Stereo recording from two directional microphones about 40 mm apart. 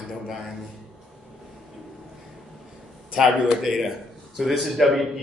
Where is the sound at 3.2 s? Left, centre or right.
Centre.